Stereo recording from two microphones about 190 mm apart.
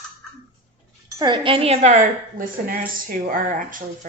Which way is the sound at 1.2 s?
25° right (ahead or behind).